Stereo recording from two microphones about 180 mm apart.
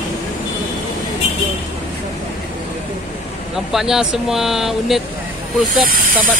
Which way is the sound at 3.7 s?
Centre (ahead or behind).